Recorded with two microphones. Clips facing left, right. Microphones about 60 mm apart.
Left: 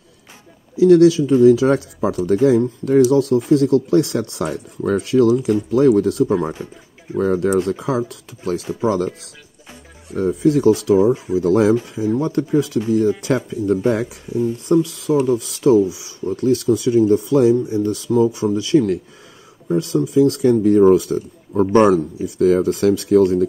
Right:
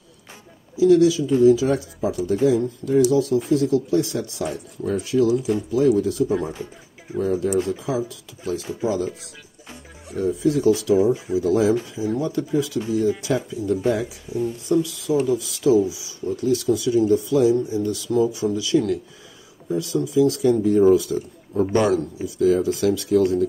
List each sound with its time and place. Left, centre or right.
0.7 s speech: left
10.1 s speech: left